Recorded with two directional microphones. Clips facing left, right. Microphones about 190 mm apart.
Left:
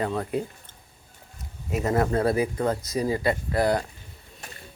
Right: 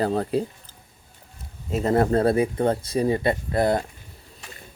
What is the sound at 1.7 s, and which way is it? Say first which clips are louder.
Speech: right 3 dB; 30° right (ahead or behind).